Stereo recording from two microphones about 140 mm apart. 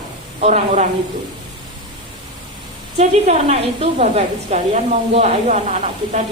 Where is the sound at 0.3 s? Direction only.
55° right (ahead or behind).